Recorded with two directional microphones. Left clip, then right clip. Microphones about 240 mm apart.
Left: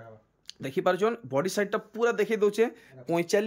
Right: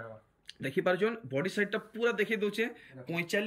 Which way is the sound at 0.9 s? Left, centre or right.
Centre.